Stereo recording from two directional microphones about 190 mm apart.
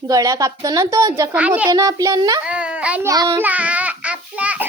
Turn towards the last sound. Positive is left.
turn(degrees=-5)  # may be behind; listen again after turning